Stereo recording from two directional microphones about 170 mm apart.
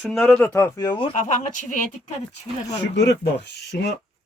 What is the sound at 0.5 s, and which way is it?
Speech, 15° left (ahead or behind).